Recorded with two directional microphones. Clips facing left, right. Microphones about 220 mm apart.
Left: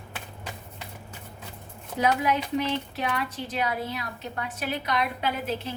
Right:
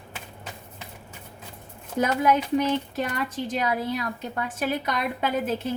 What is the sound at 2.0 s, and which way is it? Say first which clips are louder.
A woman's voice: right 3 dB; 45° right (ahead or behind).